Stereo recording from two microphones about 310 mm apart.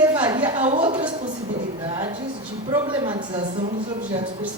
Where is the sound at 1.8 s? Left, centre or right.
Centre.